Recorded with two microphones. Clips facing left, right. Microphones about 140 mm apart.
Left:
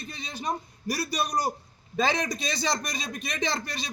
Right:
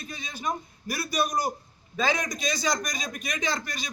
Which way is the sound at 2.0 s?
35° left (ahead or behind).